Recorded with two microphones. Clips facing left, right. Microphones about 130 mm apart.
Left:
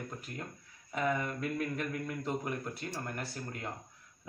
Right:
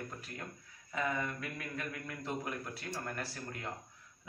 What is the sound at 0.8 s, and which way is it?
Speech, 25° left (ahead or behind).